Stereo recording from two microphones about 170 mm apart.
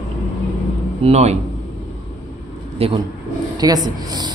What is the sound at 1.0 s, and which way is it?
Speech, 40° right (ahead or behind).